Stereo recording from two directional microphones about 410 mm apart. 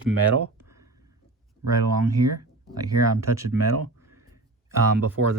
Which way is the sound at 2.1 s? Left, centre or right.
Right.